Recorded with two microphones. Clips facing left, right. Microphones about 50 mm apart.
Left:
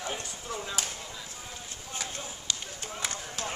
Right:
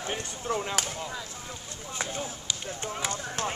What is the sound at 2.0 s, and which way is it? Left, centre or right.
Run, right.